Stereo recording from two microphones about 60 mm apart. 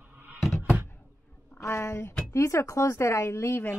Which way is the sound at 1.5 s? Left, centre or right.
Left.